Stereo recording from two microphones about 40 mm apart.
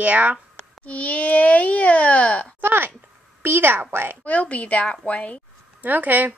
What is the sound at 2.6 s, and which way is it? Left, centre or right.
A woman's voice, right.